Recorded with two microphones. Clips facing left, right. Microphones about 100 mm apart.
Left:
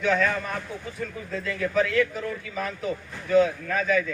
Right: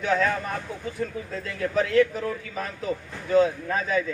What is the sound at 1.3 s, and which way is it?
A man's voice, 35° right (ahead or behind).